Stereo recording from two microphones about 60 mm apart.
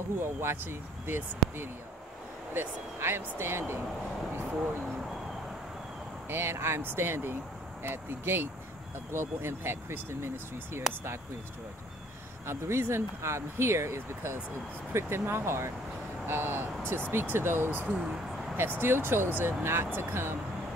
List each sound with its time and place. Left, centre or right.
0.4 s speech: right
6.2 s speech: right
12.4 s speech: right
17.9 s speech: centre
18.8 s speech: right